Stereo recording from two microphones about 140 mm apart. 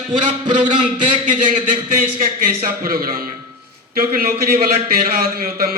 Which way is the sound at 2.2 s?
90° right.